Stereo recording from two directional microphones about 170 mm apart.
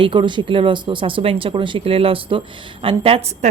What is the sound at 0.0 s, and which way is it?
Speech, 30° right (ahead or behind).